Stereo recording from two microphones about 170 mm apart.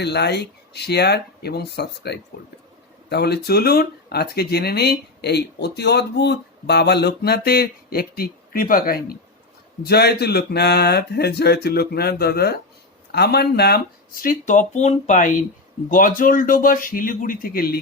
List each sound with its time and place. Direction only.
0.0 s speech: 80° left; by 9.1 s 55° left (ahead or behind)
9.8 s speech: 70° left (ahead or behind)